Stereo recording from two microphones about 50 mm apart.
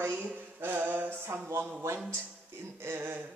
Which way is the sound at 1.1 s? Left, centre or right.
Right.